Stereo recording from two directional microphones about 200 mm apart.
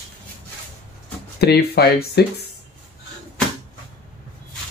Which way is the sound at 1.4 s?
50° left (ahead or behind).